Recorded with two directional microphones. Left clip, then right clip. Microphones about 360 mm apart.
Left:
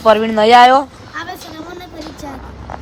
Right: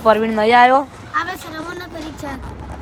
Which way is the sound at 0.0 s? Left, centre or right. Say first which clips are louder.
Left 3 dB; centre.